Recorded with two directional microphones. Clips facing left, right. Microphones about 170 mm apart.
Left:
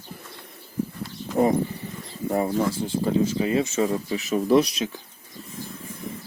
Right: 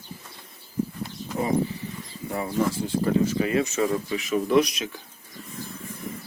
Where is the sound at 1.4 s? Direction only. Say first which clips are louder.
Left 7 dB; 55° left (ahead or behind).